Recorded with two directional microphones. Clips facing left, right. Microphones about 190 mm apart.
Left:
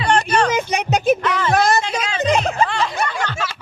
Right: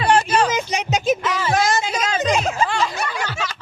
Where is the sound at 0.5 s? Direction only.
60° left (ahead or behind).